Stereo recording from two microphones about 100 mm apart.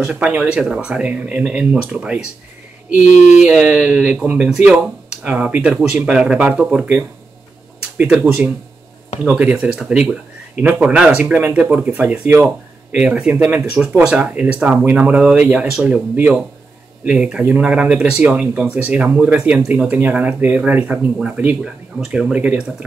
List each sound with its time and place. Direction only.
0.0 s speech: 10° right (ahead or behind)
3.4 s speech: 10° right (ahead or behind)
8.1 s speech: 10° right (ahead or behind)
22.0 s speech: 5° right (ahead or behind)